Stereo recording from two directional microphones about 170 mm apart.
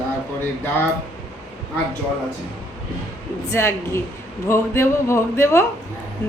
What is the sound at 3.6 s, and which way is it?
A woman's voice, 15° left (ahead or behind).